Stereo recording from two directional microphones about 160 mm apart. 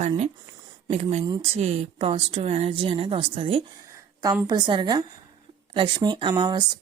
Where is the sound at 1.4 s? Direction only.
40° right (ahead or behind).